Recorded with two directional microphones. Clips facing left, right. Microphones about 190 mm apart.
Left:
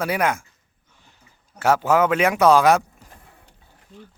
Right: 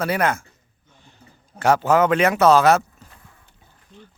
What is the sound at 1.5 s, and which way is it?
Speech, 5° left (ahead or behind).